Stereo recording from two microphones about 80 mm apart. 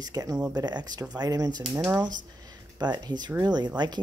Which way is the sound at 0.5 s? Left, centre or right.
Right.